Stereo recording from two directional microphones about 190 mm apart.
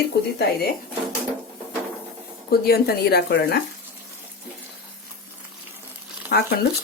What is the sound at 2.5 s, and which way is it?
Speech, 55° left (ahead or behind).